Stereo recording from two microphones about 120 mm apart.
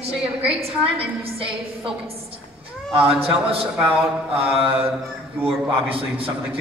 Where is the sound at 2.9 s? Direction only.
50° right (ahead or behind).